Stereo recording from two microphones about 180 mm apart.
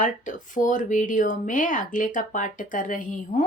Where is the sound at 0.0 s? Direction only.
45° left (ahead or behind).